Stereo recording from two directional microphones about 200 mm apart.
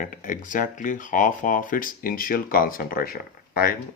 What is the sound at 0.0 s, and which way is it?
Speech, 40° left (ahead or behind).